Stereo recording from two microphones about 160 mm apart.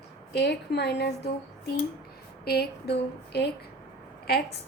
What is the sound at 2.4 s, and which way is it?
Speech, 80° left.